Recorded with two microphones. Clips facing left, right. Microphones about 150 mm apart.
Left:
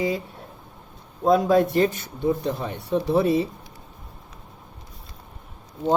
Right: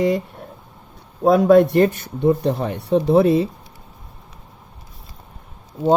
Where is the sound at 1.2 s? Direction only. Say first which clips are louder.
Right 6 dB; 60° right (ahead or behind).